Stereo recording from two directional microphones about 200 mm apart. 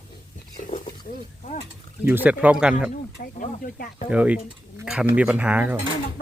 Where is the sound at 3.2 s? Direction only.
45° left (ahead or behind).